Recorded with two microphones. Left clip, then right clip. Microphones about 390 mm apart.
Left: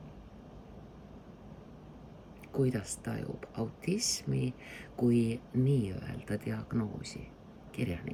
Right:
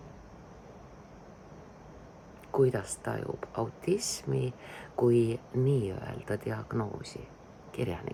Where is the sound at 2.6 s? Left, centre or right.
Centre.